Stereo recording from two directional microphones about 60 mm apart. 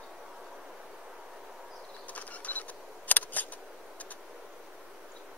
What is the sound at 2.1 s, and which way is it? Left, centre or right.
Camera, left.